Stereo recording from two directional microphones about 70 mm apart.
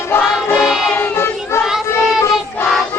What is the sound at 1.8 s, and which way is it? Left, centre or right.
Child singing, left.